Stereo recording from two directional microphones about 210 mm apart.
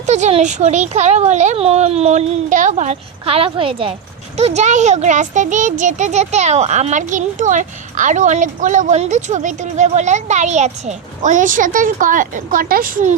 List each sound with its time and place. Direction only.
0.0 s a child's voice: 30° right (ahead or behind)